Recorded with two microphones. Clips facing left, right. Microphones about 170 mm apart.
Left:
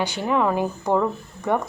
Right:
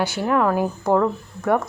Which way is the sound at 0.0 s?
10° right (ahead or behind).